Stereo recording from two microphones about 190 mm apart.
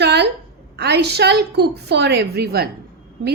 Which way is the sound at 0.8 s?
60° right (ahead or behind).